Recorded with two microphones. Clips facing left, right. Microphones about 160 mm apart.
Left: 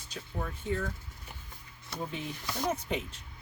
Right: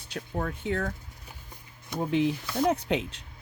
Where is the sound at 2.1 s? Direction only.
90° right.